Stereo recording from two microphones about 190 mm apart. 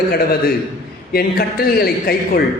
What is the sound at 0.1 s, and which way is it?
A man's voice, 55° left (ahead or behind).